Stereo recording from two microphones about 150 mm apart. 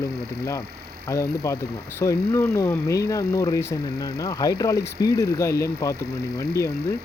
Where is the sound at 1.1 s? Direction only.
20° left (ahead or behind).